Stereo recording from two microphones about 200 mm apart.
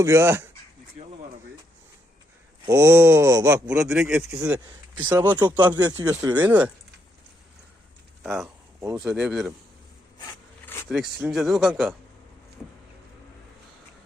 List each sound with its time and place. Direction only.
0.0 s speech: 15° right (ahead or behind)
1.0 s a sound: 30° right (ahead or behind)
2.6 s speech: 15° right (ahead or behind)
6.2 s speech: 10° right (ahead or behind)
8.2 s speech: centre (ahead or behind)
10.8 s speech: centre (ahead or behind)